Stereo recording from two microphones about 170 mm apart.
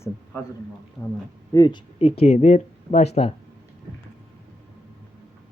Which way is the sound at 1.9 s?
35° left (ahead or behind).